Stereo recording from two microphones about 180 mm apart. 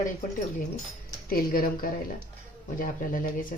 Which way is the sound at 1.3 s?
55° left (ahead or behind).